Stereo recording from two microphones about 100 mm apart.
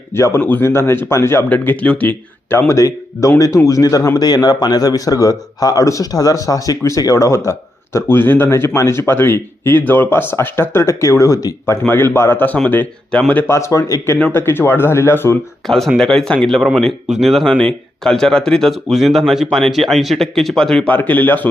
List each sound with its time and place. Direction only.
0.1 s speech: 25° left (ahead or behind)
1.5 s speech: 15° left (ahead or behind)
2.7 s a man's voice: 35° left (ahead or behind); by 13.4 s 10° left (ahead or behind)
13.5 s a man's voice: 30° left (ahead or behind)
15.6 s speech: 5° left (ahead or behind)
16.6 s speech: 5° right (ahead or behind)
20.9 s speech: 15° left (ahead or behind)